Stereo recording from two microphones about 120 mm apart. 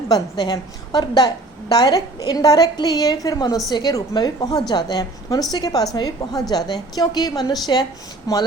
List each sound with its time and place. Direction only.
0.1 s a woman's voice: 35° left (ahead or behind)